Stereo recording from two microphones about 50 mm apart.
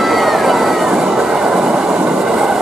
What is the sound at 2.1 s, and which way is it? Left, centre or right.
Train, centre.